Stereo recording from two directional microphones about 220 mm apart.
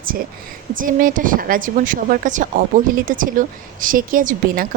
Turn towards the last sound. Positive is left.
turn(degrees=-40)  # may be behind; listen again after turning